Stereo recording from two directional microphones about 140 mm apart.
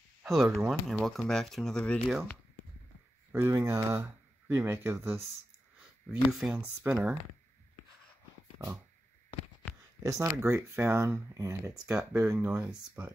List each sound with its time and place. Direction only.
0.2 s speech: centre (ahead or behind)
3.3 s speech: 20° right (ahead or behind)
6.3 s speech: 5° right (ahead or behind)
10.0 s speech: 20° right (ahead or behind)
11.7 s speech: 5° right (ahead or behind)
12.3 s speech: 20° right (ahead or behind)